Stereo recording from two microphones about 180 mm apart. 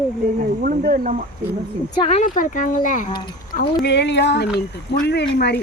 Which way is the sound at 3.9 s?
75° left (ahead or behind).